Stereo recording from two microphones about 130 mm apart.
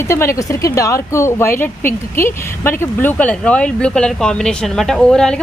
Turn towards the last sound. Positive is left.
turn(degrees=5)  # may be behind; listen again after turning